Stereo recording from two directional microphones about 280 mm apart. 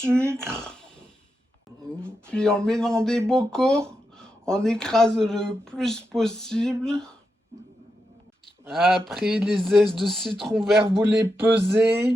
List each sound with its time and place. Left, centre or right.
0.0 s speech: centre
2.2 s speech: centre
8.6 s speech: centre
11.5 s a sound: right